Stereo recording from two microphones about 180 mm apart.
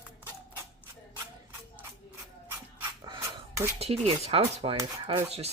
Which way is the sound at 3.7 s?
35° right (ahead or behind).